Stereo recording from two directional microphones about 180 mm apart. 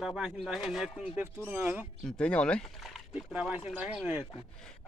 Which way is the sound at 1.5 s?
10° right (ahead or behind).